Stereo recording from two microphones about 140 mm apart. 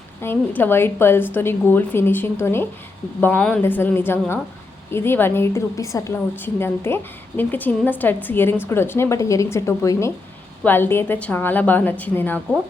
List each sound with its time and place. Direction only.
0.2 s a woman's voice: 15° left (ahead or behind)